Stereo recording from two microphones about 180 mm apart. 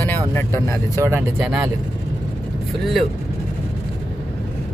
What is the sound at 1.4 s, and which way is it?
Speech, 5° right (ahead or behind).